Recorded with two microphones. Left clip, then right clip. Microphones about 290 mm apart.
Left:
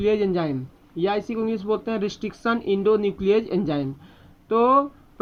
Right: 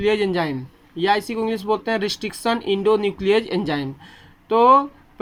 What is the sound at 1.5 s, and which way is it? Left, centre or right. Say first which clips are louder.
Speech: right 3 dB; right.